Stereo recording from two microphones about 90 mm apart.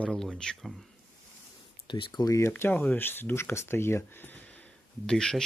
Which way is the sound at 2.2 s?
35° left (ahead or behind).